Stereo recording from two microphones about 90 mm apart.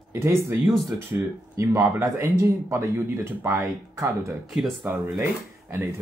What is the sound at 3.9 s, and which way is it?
Speech, 40° right (ahead or behind).